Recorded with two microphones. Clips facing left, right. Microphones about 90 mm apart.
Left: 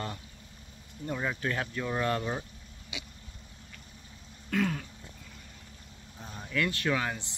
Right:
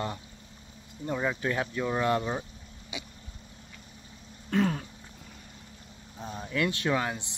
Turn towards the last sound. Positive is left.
turn(degrees=-15)  # may be behind; listen again after turning